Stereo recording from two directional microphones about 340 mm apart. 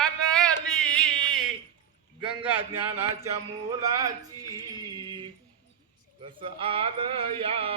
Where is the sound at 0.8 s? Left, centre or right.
Centre.